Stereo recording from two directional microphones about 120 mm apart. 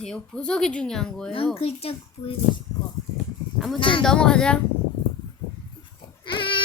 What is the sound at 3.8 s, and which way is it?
Speech, 45° left (ahead or behind).